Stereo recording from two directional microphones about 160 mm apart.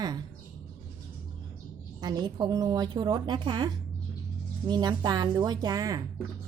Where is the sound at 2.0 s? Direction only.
25° right (ahead or behind).